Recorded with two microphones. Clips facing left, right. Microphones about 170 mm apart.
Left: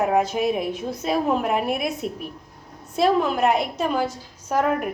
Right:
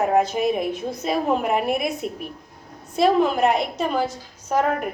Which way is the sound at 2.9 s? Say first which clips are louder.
Right 2 dB; centre (ahead or behind).